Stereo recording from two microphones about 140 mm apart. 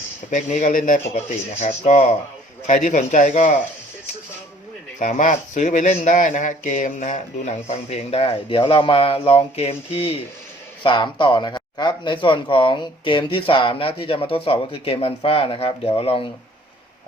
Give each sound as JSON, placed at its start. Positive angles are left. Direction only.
{"t": 0.3, "sound": "a man's voice", "side_deg": 65}
{"t": 1.6, "sound": "speech", "side_deg": 55}
{"t": 2.6, "sound": "a man's voice", "side_deg": 65}
{"t": 4.9, "sound": "speech", "side_deg": 70}